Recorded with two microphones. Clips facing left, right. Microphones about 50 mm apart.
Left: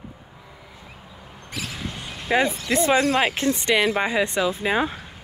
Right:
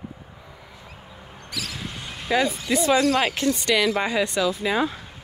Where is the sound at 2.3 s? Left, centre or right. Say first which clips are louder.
Left 1 dB; left.